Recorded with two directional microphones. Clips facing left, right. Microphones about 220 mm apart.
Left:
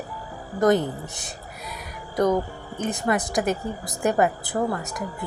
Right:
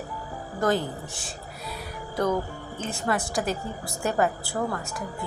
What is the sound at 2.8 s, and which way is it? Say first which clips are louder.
A woman's voice: left 4 dB; 15° left (ahead or behind).